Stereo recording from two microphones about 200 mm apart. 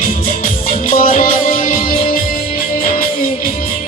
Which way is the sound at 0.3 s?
45° left (ahead or behind).